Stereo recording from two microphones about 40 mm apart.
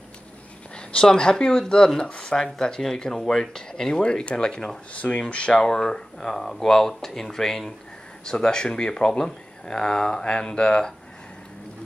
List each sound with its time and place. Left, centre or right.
1.0 s speech: centre
2.0 s a sound: left
2.3 s speech: centre
4.9 s speech: left
5.5 s speech: centre